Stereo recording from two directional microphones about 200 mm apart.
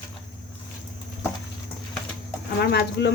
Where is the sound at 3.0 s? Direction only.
55° left (ahead or behind).